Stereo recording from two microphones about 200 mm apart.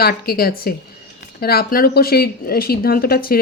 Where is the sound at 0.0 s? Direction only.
50° left (ahead or behind).